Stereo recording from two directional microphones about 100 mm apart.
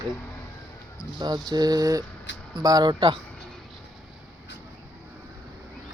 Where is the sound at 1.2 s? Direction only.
45° right (ahead or behind).